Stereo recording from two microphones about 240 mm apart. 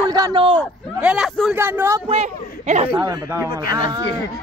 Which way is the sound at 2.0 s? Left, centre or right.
Right.